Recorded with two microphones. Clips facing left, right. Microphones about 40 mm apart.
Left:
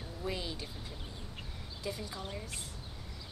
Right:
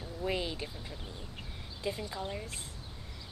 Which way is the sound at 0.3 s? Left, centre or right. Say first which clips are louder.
Right 4 dB; right.